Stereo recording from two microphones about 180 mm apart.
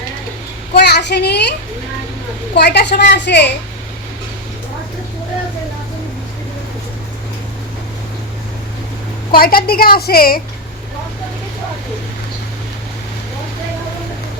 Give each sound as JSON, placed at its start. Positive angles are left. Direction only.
{"t": 0.7, "sound": "a child's voice", "side_deg": 65}
{"t": 2.6, "sound": "a woman's voice", "side_deg": 65}
{"t": 9.3, "sound": "a woman's voice", "side_deg": 55}